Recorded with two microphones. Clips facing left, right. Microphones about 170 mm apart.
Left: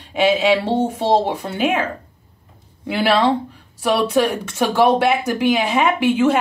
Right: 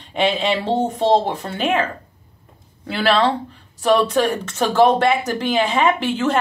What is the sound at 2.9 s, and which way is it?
Speech, 15° left (ahead or behind).